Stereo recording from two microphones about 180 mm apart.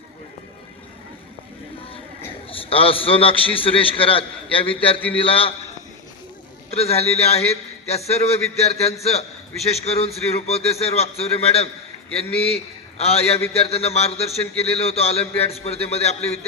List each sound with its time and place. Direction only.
2.5 s a man's voice: 30° left (ahead or behind)
6.7 s a man's voice: 35° left (ahead or behind)
13.0 s a man's voice: 35° left (ahead or behind)